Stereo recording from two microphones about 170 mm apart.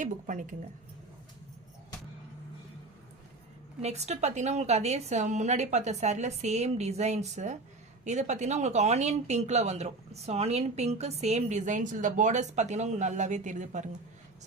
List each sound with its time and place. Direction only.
0.0 s speech: 50° right (ahead or behind)
3.8 s a woman's voice: 40° right (ahead or behind)